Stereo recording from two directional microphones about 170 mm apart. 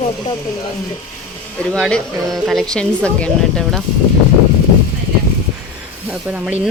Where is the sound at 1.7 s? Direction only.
5° left (ahead or behind).